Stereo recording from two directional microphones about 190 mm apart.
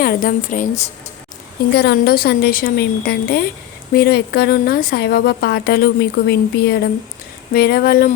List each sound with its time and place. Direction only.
0.0 s a woman's voice: 45° left (ahead or behind)
1.7 s a woman's voice: 60° left (ahead or behind)